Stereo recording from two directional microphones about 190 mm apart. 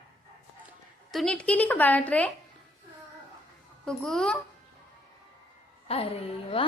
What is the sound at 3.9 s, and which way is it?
Speech, 5° left (ahead or behind).